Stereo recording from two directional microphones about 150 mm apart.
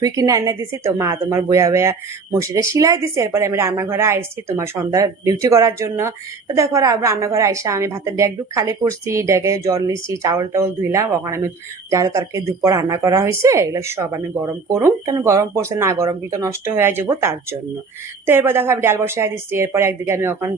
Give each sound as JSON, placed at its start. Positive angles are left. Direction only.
{"t": 0.0, "sound": "a woman's voice", "side_deg": -20}